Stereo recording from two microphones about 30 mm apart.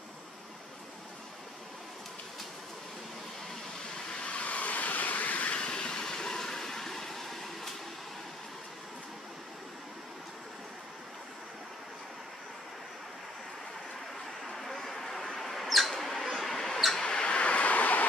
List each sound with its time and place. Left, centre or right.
4.2 s vehicle: left
5.6 s train: left; by 7.7 s centre
14.6 s a sound: centre
17.0 s vehicle: left